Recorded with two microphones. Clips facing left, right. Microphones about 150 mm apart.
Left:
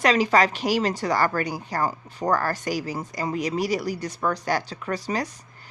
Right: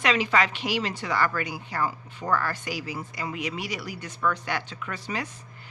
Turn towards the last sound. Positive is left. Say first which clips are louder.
# left 6 dB
turn(degrees=40)  # may be behind; listen again after turning